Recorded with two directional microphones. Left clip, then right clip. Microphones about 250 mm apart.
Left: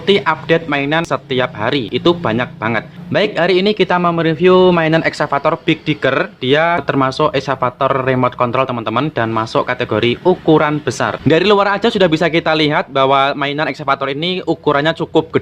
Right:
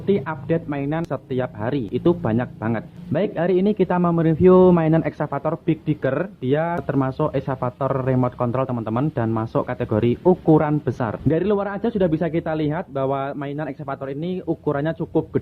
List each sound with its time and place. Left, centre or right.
0.1 s speech: centre
10.2 s speech: centre
10.6 s speech: centre
11.3 s speech: centre